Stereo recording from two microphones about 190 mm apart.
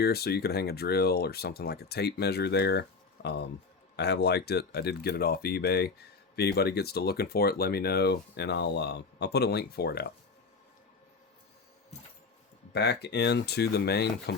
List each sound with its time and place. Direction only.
0.0 s speech: 55° left (ahead or behind)
3.2 s speech: 50° left (ahead or behind)
3.9 s speech: 60° left (ahead or behind)
12.7 s speech: 60° left (ahead or behind)